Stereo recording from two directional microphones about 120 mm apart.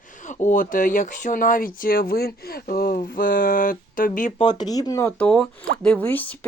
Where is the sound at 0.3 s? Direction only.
90° left.